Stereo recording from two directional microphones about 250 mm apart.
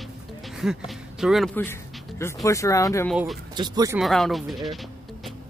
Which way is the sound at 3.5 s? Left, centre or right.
Centre.